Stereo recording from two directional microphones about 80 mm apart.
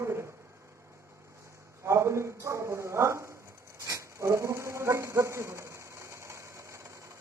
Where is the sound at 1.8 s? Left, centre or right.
Right.